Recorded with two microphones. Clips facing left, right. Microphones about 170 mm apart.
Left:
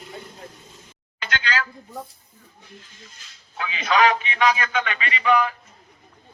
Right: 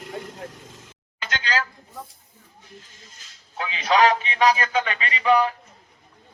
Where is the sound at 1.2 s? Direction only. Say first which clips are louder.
Even; 40° right (ahead or behind).